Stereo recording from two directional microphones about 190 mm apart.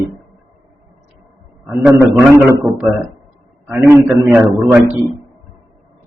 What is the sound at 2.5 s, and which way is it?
Speech, 15° right (ahead or behind).